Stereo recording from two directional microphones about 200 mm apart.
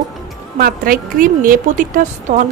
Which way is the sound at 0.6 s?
45° right (ahead or behind).